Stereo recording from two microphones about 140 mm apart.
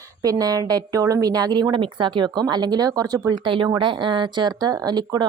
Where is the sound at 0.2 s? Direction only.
25° right (ahead or behind).